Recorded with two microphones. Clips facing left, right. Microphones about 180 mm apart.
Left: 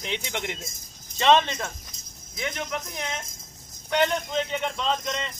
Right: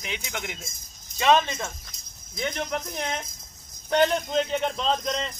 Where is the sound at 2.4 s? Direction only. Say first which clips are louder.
Right 2 dB; 35° right (ahead or behind).